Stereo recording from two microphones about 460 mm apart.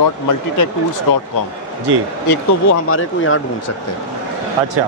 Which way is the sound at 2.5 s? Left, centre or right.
Left.